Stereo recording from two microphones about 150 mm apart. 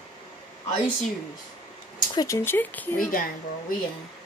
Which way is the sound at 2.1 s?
25° left (ahead or behind).